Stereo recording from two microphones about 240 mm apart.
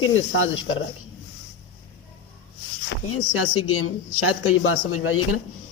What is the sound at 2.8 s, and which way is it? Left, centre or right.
Speech, left.